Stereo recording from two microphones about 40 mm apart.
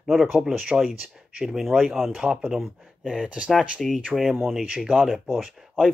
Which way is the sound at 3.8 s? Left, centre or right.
Centre.